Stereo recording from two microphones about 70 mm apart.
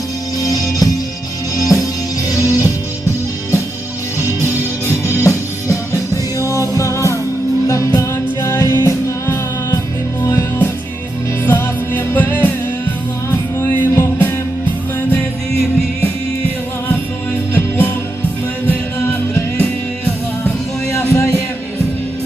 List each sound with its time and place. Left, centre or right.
0.3 s music: left
4.2 s music: left
10.2 s music: left
13.6 s music: left
17.5 s music: left
20.9 s music: left